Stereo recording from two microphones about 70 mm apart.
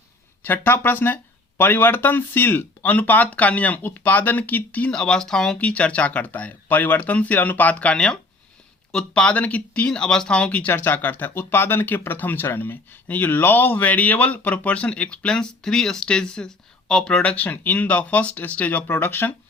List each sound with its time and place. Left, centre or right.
0.4 s speech: left
4.9 s speech: centre
5.5 s speech: centre
10.7 s speech: left